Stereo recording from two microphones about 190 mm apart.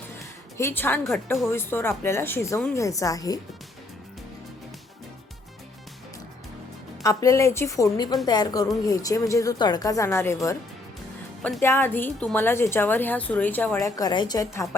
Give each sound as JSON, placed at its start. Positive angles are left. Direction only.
{"t": 0.5, "sound": "a woman's voice", "side_deg": 10}
{"t": 7.0, "sound": "a woman's voice", "side_deg": 15}
{"t": 11.4, "sound": "a woman's voice", "side_deg": 10}